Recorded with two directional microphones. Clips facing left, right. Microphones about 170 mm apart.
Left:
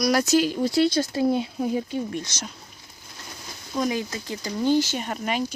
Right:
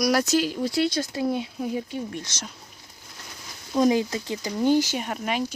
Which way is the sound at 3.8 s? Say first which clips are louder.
Right 5 dB; 30° right (ahead or behind).